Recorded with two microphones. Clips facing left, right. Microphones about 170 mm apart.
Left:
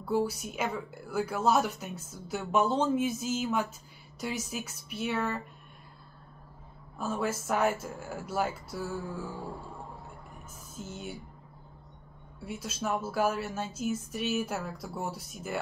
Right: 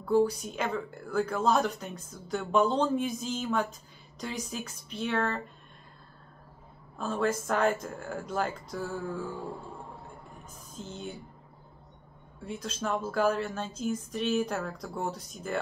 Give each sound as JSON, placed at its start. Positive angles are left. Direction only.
{"t": 0.0, "sound": "a woman's voice", "side_deg": 10}
{"t": 7.0, "sound": "a woman's voice", "side_deg": 5}
{"t": 10.8, "sound": "a woman's voice", "side_deg": 10}
{"t": 12.4, "sound": "a woman's voice", "side_deg": 5}